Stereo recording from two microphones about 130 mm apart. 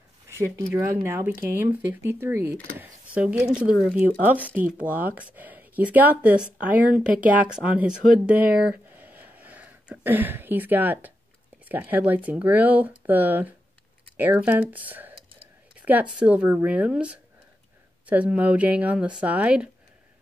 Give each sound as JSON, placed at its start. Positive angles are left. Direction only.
{"t": 0.3, "sound": "speech", "side_deg": -20}
{"t": 8.3, "sound": "a sound", "side_deg": -10}
{"t": 11.7, "sound": "speech", "side_deg": -15}